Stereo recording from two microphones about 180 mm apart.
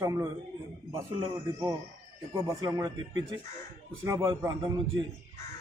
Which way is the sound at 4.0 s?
15° right (ahead or behind).